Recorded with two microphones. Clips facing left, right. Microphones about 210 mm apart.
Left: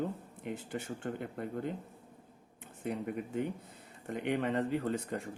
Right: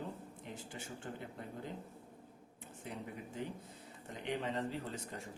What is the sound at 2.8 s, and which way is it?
Speech, 60° left (ahead or behind).